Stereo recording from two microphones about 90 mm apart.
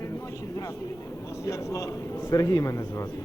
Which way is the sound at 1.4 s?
35° left (ahead or behind).